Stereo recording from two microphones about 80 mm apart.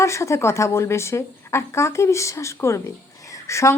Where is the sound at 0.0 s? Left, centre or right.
Left.